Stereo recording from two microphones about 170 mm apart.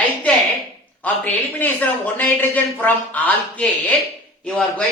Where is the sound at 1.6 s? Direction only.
10° left (ahead or behind).